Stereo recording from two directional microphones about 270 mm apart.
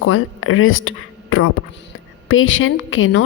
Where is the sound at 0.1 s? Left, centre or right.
Left.